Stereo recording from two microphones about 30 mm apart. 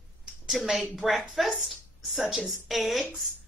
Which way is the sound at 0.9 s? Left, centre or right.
Centre.